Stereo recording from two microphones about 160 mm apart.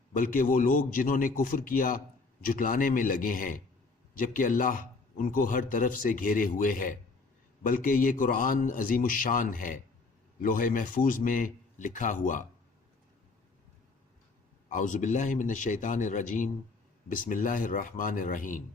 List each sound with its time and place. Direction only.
0.2 s a man's voice: 60° left (ahead or behind)
14.7 s a man's voice: 50° left (ahead or behind)